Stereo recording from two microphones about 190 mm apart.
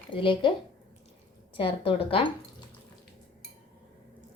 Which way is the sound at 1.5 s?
25° left (ahead or behind).